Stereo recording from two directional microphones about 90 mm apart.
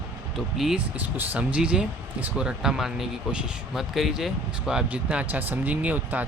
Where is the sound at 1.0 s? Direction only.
20° right (ahead or behind).